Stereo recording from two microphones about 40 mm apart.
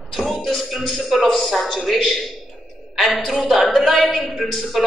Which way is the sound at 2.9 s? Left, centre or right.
Centre.